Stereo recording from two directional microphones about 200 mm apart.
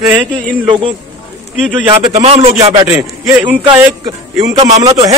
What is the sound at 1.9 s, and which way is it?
Speech, 30° right (ahead or behind).